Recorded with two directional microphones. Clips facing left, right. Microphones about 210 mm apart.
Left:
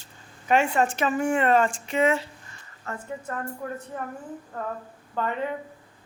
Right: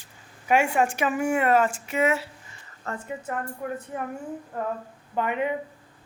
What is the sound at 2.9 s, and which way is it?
Speech, 35° right (ahead or behind).